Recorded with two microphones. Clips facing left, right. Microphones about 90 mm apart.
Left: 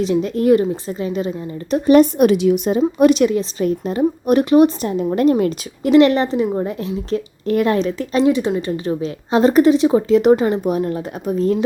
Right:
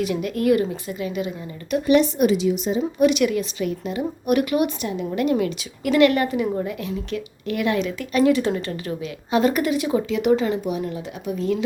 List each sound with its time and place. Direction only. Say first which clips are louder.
0.0 s a woman's voice: left 5 dB; 30° left (ahead or behind)
2.1 s a woman's voice: left 5 dB; 55° left (ahead or behind)
3.1 s a woman's voice: left 5 dB; 30° left (ahead or behind)
5.8 s a woman's voice: left 5 dB; 30° left (ahead or behind)